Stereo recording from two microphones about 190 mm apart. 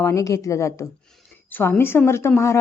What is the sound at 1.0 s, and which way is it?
Speech, 5° left (ahead or behind).